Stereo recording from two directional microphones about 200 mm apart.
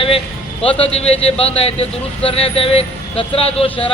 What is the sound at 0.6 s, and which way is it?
A man's voice, 30° left (ahead or behind).